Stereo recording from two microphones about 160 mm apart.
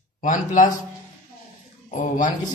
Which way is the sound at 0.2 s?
55° left (ahead or behind).